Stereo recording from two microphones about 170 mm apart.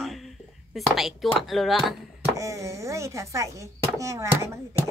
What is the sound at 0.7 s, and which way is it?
Speech, centre (ahead or behind).